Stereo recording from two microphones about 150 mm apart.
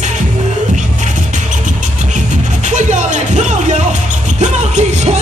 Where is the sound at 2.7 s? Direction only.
55° right (ahead or behind).